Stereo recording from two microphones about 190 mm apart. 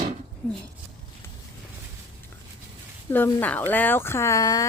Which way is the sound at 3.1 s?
10° left (ahead or behind).